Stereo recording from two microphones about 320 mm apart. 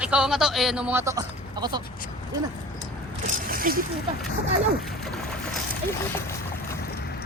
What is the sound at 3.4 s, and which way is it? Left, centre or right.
Zipper, right.